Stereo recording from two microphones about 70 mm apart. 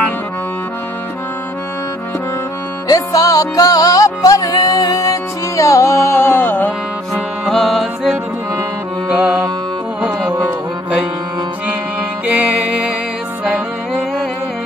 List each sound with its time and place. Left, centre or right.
2.9 s music: left
7.4 s music: centre
9.1 s music: right
12.3 s music: centre
13.5 s music: centre